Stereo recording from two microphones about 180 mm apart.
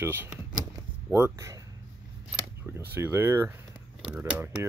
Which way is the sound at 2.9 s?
10° right (ahead or behind).